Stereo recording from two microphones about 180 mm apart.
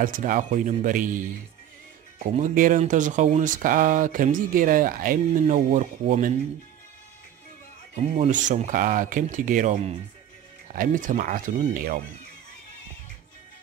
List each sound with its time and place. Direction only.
0.0 s speech: 50° right (ahead or behind)
7.9 s speech: 45° right (ahead or behind)